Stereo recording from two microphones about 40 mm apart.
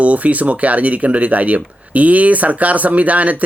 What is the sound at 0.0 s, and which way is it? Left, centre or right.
Speech, right.